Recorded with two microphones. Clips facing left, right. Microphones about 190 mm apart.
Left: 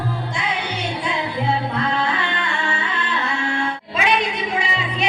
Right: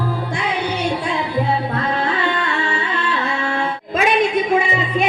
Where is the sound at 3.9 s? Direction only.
50° right (ahead or behind).